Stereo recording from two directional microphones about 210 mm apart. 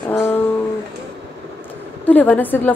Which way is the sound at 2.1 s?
10° left (ahead or behind).